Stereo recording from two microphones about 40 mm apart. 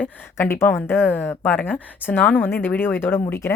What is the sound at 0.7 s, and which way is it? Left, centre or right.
Speech, left.